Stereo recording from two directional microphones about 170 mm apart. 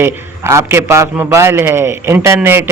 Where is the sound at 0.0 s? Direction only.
15° right (ahead or behind).